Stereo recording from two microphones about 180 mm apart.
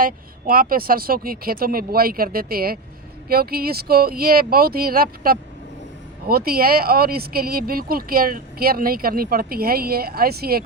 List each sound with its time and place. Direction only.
0.0 s speech: 50° right (ahead or behind)